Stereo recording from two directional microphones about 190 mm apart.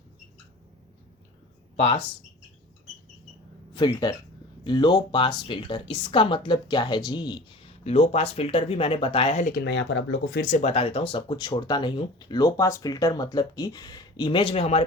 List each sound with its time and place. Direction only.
1.7 s speech: 35° left (ahead or behind)
3.8 s a woman's voice: 25° left (ahead or behind); by 9.6 s 45° left (ahead or behind)
9.6 s speech: 70° left (ahead or behind)
10.4 s a woman's voice: 35° left (ahead or behind)